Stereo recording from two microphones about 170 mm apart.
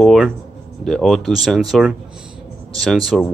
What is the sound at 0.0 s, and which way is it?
Speech, centre (ahead or behind).